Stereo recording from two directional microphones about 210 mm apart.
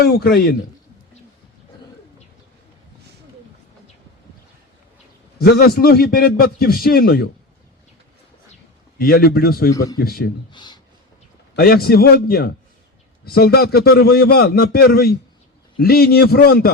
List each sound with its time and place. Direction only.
0.0 s a man's voice: 50° left (ahead or behind)
5.4 s a man's voice: 45° left (ahead or behind)
9.0 s a man's voice: 45° left (ahead or behind)
9.7 s speech: 15° left (ahead or behind)
10.0 s a man's voice: 45° left (ahead or behind)
10.5 s a sound: 20° left (ahead or behind)
11.5 s a man's voice: 45° left (ahead or behind)